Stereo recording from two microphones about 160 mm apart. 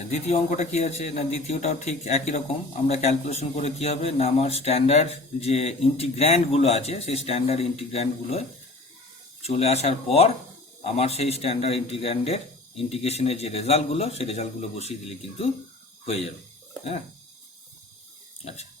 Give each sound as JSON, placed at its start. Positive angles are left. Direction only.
{"t": 0.1, "sound": "a man's voice", "side_deg": 45}
{"t": 16.0, "sound": "a man's voice", "side_deg": 40}